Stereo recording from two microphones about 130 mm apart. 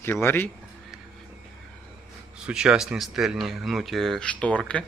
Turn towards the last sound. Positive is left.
turn(degrees=10)  # may be behind; listen again after turning